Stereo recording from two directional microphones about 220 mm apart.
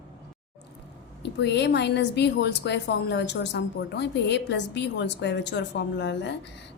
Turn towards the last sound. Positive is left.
turn(degrees=50)  # may be behind; listen again after turning